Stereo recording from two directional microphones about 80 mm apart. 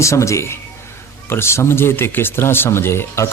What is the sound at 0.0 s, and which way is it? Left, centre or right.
A man's voice, left.